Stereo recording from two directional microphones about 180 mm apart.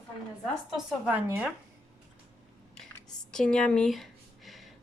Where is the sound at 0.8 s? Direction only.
5° right (ahead or behind).